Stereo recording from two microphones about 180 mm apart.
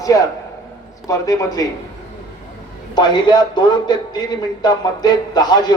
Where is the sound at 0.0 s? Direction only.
20° left (ahead or behind).